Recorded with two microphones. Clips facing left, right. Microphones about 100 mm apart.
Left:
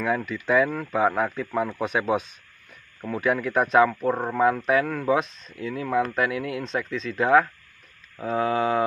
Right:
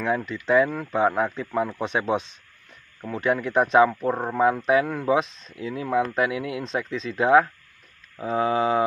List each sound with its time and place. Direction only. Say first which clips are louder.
0.0 s speech: even; 5° left (ahead or behind)